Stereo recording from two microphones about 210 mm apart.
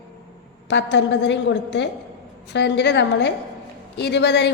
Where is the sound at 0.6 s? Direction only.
55° left (ahead or behind).